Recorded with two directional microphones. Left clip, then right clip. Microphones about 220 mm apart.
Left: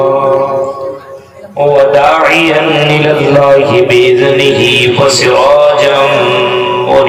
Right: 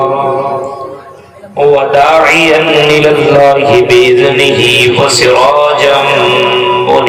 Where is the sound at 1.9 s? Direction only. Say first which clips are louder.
Right 1 dB; 55° right (ahead or behind).